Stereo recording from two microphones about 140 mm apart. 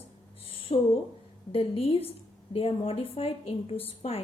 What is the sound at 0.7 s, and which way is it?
A woman's voice, 45° left (ahead or behind).